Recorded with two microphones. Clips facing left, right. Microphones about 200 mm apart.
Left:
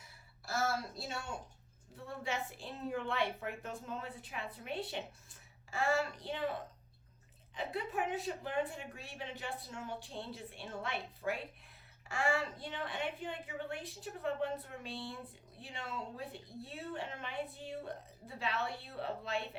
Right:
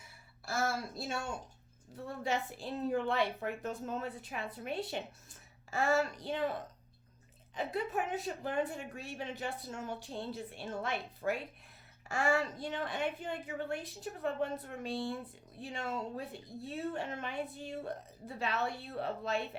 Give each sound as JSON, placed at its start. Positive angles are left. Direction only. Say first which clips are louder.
{"t": 0.4, "sound": "a sound", "louder": "right 1 dB", "side_deg": -50}
{"t": 1.9, "sound": "a woman's voice", "louder": "right 5 dB", "side_deg": -40}
{"t": 7.5, "sound": "a woman's voice", "louder": "right 3 dB", "side_deg": -45}